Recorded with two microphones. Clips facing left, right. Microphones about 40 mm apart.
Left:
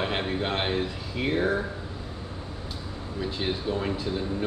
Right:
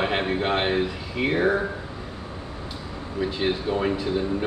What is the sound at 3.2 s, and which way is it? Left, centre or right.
Speech, right.